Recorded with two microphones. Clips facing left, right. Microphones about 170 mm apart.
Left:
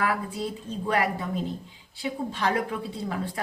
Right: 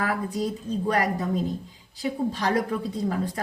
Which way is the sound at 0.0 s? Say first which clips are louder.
Right 1 dB; 40° right (ahead or behind).